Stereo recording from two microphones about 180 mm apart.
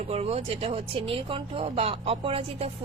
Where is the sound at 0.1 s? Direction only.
35° right (ahead or behind).